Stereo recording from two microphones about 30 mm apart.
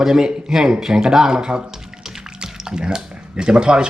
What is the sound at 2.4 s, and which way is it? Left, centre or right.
Speech, right.